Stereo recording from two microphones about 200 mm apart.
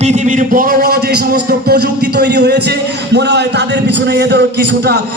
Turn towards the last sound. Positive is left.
turn(degrees=-55)  # may be behind; listen again after turning